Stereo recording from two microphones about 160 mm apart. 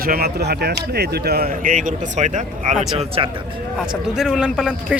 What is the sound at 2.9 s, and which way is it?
Speech, 35° right (ahead or behind).